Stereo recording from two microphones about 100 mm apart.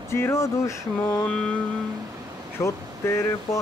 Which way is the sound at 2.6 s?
25° left (ahead or behind).